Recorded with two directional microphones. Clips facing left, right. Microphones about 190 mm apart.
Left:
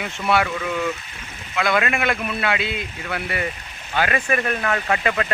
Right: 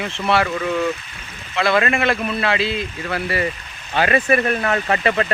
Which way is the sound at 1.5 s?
Centre (ahead or behind).